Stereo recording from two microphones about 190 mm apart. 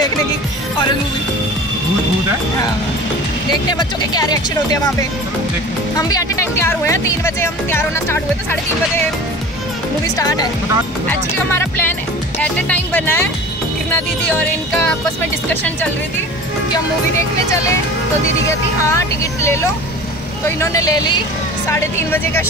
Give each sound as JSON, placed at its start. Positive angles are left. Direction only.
{"t": 3.7, "sound": "speech", "side_deg": 20}
{"t": 5.9, "sound": "speech", "side_deg": 20}
{"t": 10.1, "sound": "speech", "side_deg": 20}
{"t": 15.5, "sound": "speech", "side_deg": 10}
{"t": 18.5, "sound": "speech", "side_deg": 15}